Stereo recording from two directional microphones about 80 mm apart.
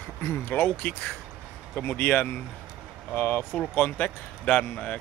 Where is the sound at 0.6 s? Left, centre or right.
Centre.